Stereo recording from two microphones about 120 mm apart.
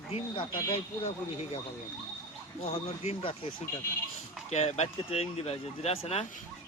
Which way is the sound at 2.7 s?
55° left (ahead or behind).